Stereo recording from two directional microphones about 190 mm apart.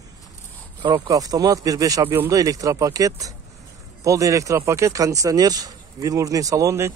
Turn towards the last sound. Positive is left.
turn(degrees=-15)  # may be behind; listen again after turning